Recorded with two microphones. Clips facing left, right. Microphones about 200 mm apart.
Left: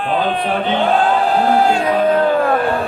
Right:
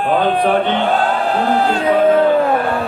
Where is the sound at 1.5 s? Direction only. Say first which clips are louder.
Left 2 dB; 10° left (ahead or behind).